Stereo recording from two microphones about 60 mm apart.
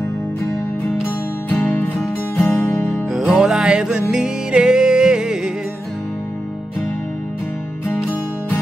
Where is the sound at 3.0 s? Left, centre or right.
Centre.